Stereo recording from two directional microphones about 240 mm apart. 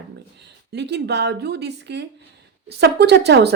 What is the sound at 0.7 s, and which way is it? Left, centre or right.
Speech, right.